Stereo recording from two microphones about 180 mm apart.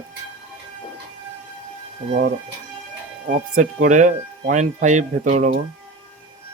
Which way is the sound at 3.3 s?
50° right (ahead or behind).